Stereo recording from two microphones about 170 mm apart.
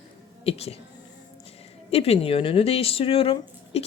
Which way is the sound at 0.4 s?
35° left (ahead or behind).